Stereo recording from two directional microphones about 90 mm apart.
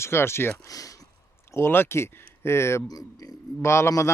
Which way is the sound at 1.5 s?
25° left (ahead or behind).